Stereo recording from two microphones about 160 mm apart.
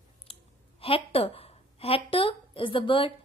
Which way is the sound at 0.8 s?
35° left (ahead or behind).